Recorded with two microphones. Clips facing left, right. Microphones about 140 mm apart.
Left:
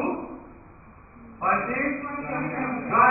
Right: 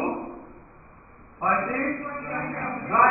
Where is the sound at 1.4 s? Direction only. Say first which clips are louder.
Even; centre (ahead or behind).